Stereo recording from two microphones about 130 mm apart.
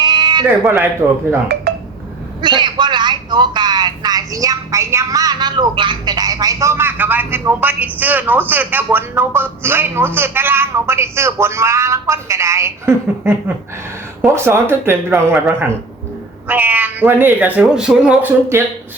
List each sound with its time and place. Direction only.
0.0 s a sound: 35° right (ahead or behind)
0.6 s speech: 15° right (ahead or behind)
2.4 s speech: 35° right (ahead or behind); by 18.6 s 15° right (ahead or behind)